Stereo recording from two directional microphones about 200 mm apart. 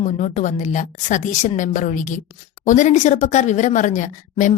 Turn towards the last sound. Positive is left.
turn(degrees=40)  # may be behind; listen again after turning